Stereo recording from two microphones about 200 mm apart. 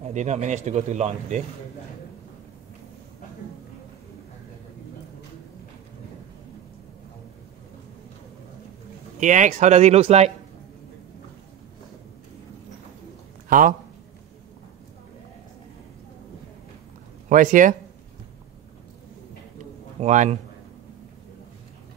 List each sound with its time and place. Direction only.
0.1 s speech: 35° right (ahead or behind)
9.2 s speech: 40° right (ahead or behind)
13.5 s a man's voice: 45° right (ahead or behind)
17.3 s speech: 40° right (ahead or behind)
19.6 s a sound: 35° right (ahead or behind)